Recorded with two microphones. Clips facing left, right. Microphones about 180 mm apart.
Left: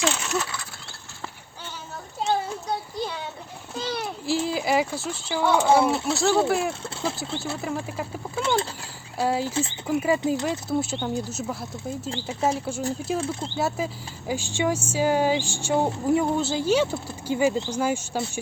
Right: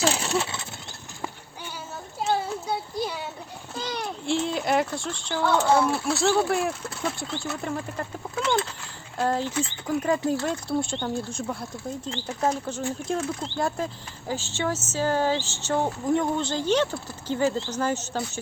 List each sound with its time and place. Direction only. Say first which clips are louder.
0.0 s a sound: right 1 dB; 35° right (ahead or behind)
2.2 s a sound: even; 5° right (ahead or behind)
3.8 s a child's voice: left 2 dB; 5° left (ahead or behind); by 6.1 s 20° left (ahead or behind)
6.1 s speech: left 1 dB; centre (ahead or behind)
6.8 s speech: left 1 dB; 25° left (ahead or behind)
7.6 s speech: left 1 dB; 5° left (ahead or behind)
9.5 s speech: left 1 dB; 25° left (ahead or behind)
9.8 s speech: left 1 dB; 10° left (ahead or behind)
13.1 s speech: left 1 dB; 30° left (ahead or behind)
13.6 s speech: left 1 dB; 5° left (ahead or behind)